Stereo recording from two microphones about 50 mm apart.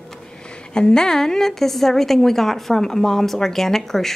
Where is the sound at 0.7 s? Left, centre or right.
Centre.